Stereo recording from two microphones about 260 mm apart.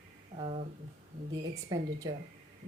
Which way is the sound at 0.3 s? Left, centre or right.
Right.